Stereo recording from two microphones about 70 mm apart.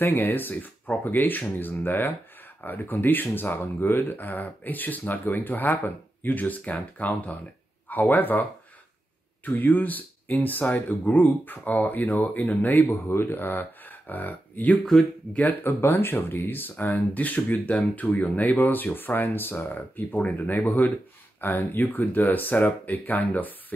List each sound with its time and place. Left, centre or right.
0.0 s speech: left